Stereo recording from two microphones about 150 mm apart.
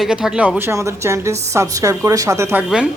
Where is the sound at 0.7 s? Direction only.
20° right (ahead or behind).